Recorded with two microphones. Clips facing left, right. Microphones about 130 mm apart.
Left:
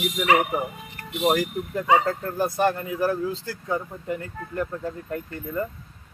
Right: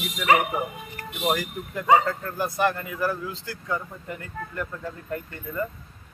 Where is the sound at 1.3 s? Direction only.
30° left (ahead or behind).